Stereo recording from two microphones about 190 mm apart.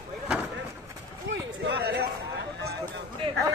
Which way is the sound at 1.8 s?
60° right (ahead or behind).